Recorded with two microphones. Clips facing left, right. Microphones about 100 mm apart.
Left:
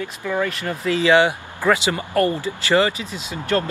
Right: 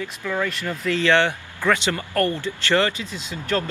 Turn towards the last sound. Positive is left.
turn(degrees=5)  # may be behind; listen again after turning